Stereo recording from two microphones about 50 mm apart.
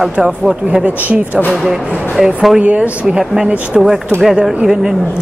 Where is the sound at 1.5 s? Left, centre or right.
Centre.